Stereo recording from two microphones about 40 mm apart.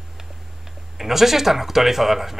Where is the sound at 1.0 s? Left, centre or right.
Centre.